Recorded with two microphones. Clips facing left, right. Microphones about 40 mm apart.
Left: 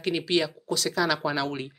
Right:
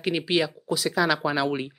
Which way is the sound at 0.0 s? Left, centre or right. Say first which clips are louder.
Right 1 dB; centre.